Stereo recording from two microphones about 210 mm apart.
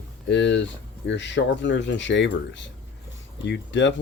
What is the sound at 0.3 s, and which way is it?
Speech, 60° left (ahead or behind).